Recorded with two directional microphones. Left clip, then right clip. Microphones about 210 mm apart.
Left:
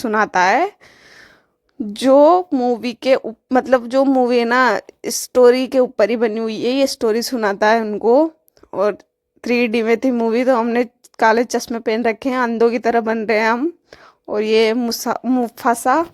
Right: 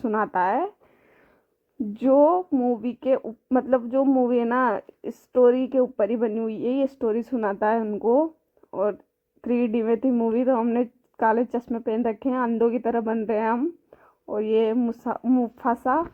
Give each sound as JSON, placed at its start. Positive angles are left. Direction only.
{"t": 0.0, "sound": "speech", "side_deg": 25}
{"t": 2.0, "sound": "speech", "side_deg": 25}